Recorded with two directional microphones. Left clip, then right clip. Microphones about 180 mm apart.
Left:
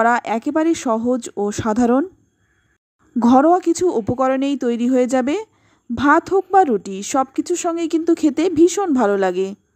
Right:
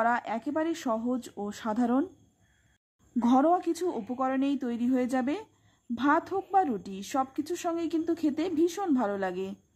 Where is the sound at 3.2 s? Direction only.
35° left (ahead or behind).